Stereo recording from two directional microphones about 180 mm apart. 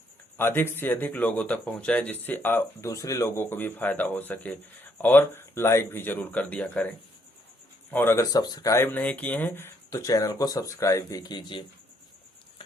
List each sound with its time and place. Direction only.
0.3 s speech: 15° left (ahead or behind)